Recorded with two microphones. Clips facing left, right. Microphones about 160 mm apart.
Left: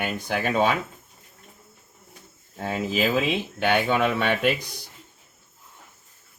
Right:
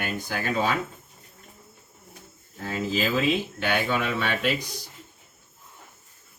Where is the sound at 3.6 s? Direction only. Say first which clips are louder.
Left 4 dB; 55° left (ahead or behind).